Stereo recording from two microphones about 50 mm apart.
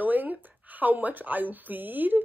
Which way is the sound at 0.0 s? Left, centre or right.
Right.